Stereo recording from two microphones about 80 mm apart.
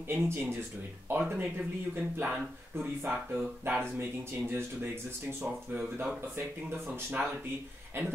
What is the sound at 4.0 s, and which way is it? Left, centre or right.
Speech, right.